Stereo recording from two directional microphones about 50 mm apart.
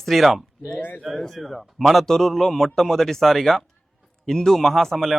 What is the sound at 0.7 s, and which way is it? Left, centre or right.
Speech, left.